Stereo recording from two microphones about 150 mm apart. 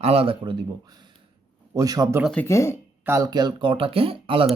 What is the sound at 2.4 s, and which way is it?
Speech, 20° left (ahead or behind).